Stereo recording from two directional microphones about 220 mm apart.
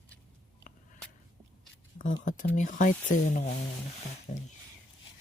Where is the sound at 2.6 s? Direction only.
35° left (ahead or behind).